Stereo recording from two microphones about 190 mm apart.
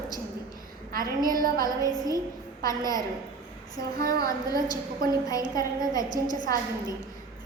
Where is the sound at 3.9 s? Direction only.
50° right (ahead or behind).